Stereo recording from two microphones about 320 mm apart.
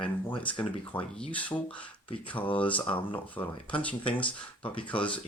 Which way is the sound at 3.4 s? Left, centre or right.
Centre.